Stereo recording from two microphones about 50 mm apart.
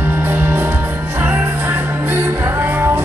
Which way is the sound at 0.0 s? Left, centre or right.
Right.